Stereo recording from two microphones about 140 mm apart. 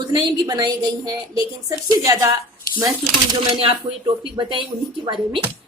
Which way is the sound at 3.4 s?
40° right (ahead or behind).